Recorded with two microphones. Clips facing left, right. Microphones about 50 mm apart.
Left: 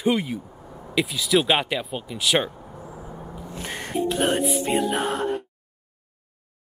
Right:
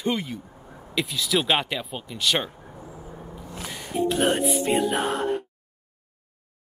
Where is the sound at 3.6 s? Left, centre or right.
Left.